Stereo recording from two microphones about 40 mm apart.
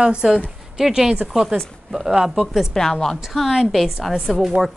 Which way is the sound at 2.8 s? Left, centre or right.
Centre.